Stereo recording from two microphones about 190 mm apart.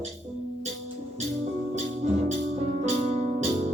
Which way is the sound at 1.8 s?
40° right (ahead or behind).